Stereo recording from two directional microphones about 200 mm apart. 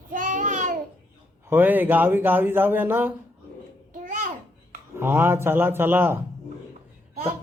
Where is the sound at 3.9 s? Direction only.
40° right (ahead or behind).